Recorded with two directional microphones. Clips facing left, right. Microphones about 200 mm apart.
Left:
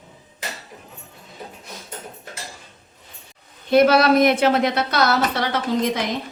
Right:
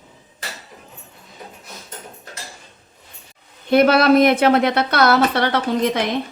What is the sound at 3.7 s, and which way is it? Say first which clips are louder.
A woman's voice: right 2 dB; 55° right (ahead or behind).